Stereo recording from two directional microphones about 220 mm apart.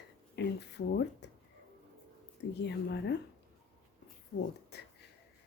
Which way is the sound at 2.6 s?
50° left (ahead or behind).